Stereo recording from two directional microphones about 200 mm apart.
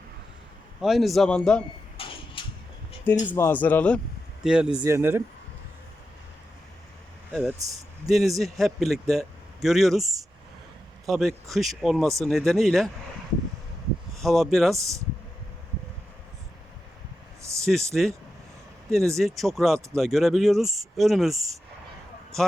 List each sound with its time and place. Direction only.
0.8 s a man's voice: centre (ahead or behind)
2.0 s a sound: 25° left (ahead or behind)
3.3 s speech: 10° left (ahead or behind)
4.4 s speech: 5° right (ahead or behind)
7.4 s speech: 15° right (ahead or behind)
8.0 s a man's voice: centre (ahead or behind)
14.2 s a man's voice: centre (ahead or behind)
14.8 s speech: 15° right (ahead or behind)
17.4 s a sound: 15° right (ahead or behind)
17.7 s a man's voice: centre (ahead or behind)